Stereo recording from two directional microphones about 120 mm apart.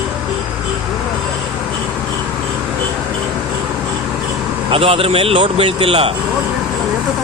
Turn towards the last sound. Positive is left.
turn(degrees=-50)  # may be behind; listen again after turning